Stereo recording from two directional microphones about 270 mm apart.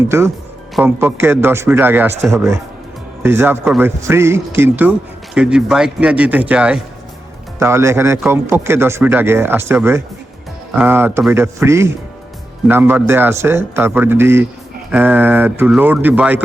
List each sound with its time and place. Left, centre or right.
0.1 s speech: centre